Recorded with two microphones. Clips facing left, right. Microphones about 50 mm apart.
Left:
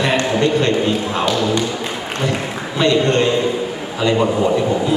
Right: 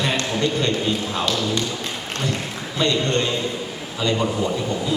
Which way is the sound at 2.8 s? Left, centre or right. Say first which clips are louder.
Left 6 dB; left.